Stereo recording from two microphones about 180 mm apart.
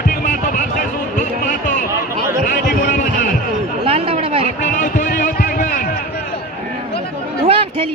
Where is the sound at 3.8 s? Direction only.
30° right (ahead or behind).